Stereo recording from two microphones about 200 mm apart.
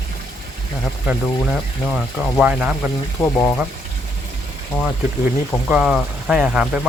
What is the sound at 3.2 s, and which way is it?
Speech, 10° left (ahead or behind).